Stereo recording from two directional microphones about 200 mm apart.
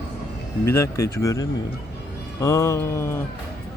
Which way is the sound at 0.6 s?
15° left (ahead or behind).